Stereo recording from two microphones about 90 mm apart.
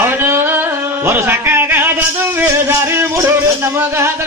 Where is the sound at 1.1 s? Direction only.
30° right (ahead or behind).